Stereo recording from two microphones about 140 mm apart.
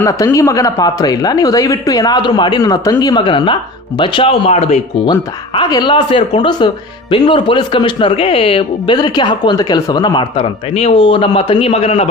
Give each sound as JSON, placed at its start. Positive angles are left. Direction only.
{"t": 0.0, "sound": "speech", "side_deg": 20}
{"t": 5.0, "sound": "speech", "side_deg": 35}